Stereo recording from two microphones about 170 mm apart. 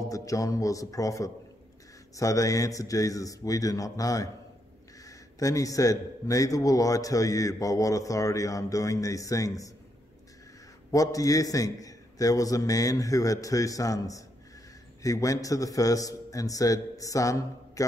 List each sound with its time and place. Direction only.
0.1 s a man's voice: 20° left (ahead or behind)
10.9 s a man's voice: 20° left (ahead or behind)